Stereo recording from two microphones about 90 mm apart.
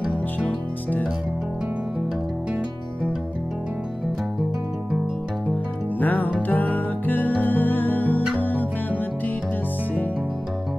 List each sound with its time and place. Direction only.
0.1 s music: 10° left (ahead or behind)
5.9 s music: 20° left (ahead or behind)